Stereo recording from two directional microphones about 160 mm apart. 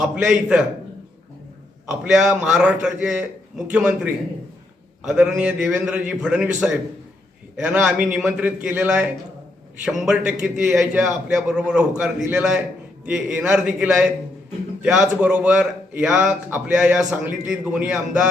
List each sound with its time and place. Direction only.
0.0 s a man's voice: 5° right (ahead or behind)
1.9 s a man's voice: 5° right (ahead or behind)